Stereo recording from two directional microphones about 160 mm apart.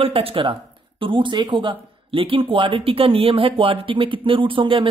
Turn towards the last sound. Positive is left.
turn(degrees=-30)  # may be behind; listen again after turning